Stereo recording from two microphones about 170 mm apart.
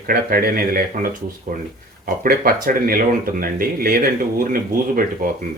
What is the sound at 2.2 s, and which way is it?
Speech, 55° right (ahead or behind).